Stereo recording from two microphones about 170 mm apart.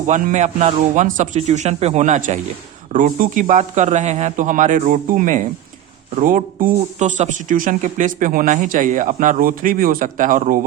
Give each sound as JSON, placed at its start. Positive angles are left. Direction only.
{"t": 0.1, "sound": "speech", "side_deg": -45}